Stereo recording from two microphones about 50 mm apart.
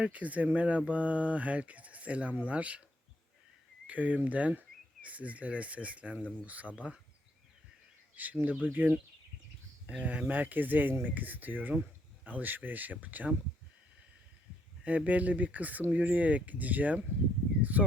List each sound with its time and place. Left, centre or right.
0.0 s speech: right
3.8 s speech: right
8.1 s speech: right
9.8 s speech: right
14.8 s speech: right
17.6 s a sound: right